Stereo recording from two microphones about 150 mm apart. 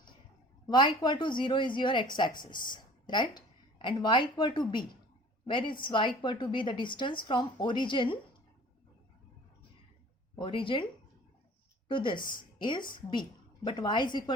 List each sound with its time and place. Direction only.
0.7 s speech: 30° left (ahead or behind)
10.3 s speech: 35° left (ahead or behind)
11.9 s a woman's voice: 35° left (ahead or behind)